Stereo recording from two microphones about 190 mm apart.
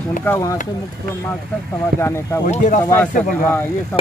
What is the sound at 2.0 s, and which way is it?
Speech, 15° left (ahead or behind).